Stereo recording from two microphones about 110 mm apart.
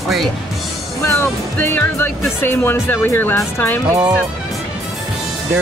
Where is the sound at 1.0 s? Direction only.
20° left (ahead or behind).